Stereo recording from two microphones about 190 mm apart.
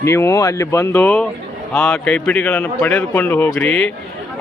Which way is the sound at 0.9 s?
5° left (ahead or behind).